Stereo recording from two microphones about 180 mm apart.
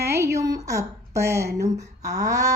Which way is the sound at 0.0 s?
15° right (ahead or behind).